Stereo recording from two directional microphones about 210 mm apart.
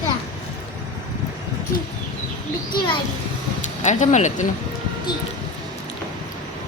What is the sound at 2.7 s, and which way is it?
Children playing, 25° left (ahead or behind).